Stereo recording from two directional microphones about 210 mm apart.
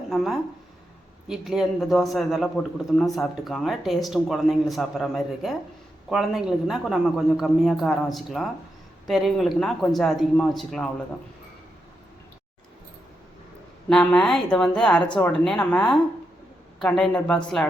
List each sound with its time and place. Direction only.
0.1 s a man's voice: centre (ahead or behind)
13.9 s a man's voice: 5° left (ahead or behind)